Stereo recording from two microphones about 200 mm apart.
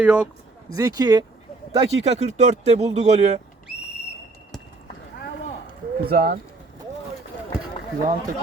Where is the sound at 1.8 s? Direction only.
30° right (ahead or behind).